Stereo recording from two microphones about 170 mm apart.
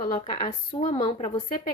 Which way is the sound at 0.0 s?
30° left (ahead or behind).